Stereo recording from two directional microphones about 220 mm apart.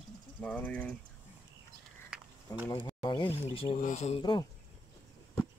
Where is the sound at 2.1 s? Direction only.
5° right (ahead or behind).